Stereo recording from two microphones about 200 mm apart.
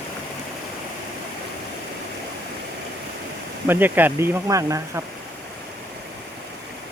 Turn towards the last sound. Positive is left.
turn(degrees=-15)  # may be behind; listen again after turning